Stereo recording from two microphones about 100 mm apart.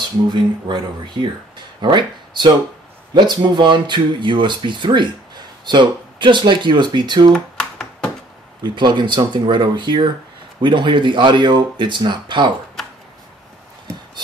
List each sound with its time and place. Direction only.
0.3 s speech: 50° right (ahead or behind)
7.3 s computer keyboard: 10° left (ahead or behind)
8.6 s speech: 50° right (ahead or behind)